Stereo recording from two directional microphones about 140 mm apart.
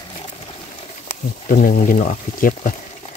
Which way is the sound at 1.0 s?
75° left (ahead or behind).